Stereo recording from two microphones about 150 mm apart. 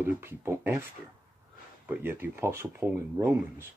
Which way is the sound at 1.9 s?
15° right (ahead or behind).